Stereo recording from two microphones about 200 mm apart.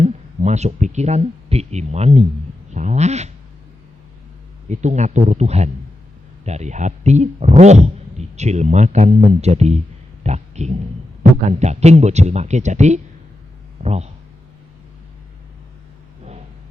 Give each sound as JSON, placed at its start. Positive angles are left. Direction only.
{"t": 0.0, "sound": "speech", "side_deg": -35}
{"t": 4.7, "sound": "speech", "side_deg": -35}